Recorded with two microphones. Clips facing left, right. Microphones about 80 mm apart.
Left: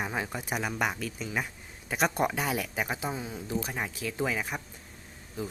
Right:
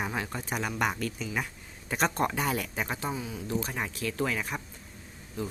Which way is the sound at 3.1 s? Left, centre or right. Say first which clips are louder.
Right 1 dB; left.